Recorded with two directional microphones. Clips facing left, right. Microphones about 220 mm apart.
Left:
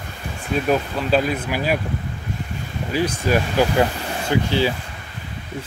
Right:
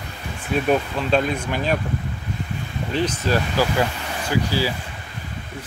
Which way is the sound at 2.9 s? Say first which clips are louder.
Left 2 dB; 10° left (ahead or behind).